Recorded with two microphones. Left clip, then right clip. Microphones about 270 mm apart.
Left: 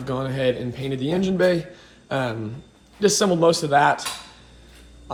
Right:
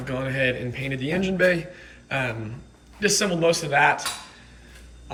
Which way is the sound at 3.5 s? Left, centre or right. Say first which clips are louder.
Left 2 dB; centre.